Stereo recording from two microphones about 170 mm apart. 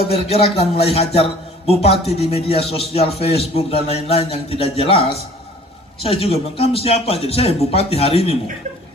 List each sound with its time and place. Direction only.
0.1 s speech: 35° left (ahead or behind)